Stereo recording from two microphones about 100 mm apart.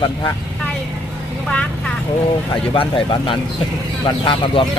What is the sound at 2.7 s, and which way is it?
Speech, 65° left (ahead or behind).